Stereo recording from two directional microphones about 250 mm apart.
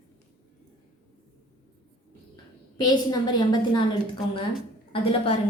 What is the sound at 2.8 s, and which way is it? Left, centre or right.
A woman's voice, centre.